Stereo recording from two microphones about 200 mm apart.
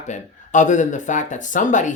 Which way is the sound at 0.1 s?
40° left (ahead or behind).